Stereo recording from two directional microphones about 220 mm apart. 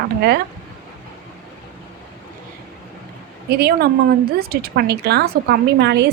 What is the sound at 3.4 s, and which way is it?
A woman's voice, 45° right (ahead or behind).